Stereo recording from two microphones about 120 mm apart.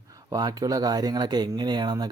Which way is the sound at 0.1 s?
30° right (ahead or behind).